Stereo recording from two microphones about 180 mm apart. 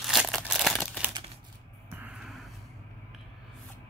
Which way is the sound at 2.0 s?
Centre (ahead or behind).